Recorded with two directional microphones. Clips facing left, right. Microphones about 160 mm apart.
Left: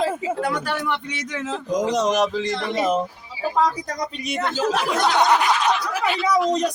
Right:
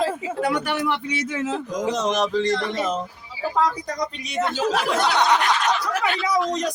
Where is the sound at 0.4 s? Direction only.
5° right (ahead or behind).